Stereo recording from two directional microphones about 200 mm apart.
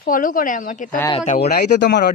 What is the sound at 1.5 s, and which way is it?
Speech, 50° left (ahead or behind).